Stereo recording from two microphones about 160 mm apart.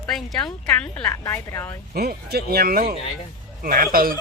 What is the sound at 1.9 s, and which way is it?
Speech, 75° right (ahead or behind).